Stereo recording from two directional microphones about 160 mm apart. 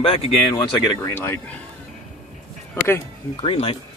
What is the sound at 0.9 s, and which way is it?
Speech, 15° left (ahead or behind).